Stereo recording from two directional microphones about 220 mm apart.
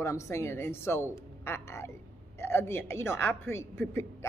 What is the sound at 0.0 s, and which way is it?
A woman's voice, 15° left (ahead or behind).